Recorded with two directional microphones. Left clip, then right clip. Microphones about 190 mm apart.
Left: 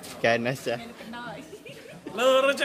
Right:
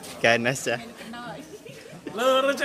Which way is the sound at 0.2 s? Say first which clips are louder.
Right 3 dB; centre (ahead or behind).